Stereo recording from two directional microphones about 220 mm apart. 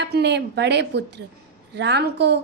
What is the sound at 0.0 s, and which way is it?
A woman's voice, 50° right (ahead or behind).